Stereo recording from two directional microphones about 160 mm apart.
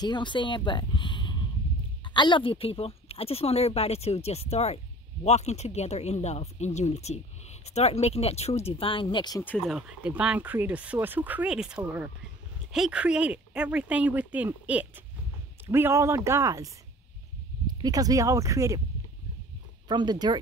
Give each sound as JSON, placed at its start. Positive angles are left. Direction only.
{"t": 0.0, "sound": "speech", "side_deg": 30}
{"t": 9.4, "sound": "speech", "side_deg": 10}
{"t": 9.7, "sound": "speech", "side_deg": -5}
{"t": 19.9, "sound": "speech", "side_deg": -25}